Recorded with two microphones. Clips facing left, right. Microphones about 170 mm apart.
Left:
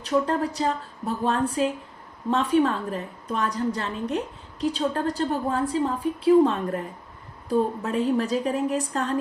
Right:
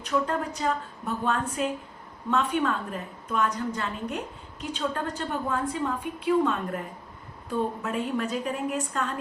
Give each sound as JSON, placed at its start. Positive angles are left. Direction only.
{"t": 0.0, "sound": "a woman's voice", "side_deg": 35}